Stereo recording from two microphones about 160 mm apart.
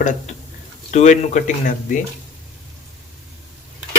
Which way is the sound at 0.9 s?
50° left (ahead or behind).